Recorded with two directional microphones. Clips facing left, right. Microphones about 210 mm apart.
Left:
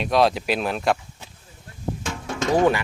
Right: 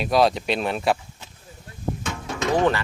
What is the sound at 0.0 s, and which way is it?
Speech, centre (ahead or behind).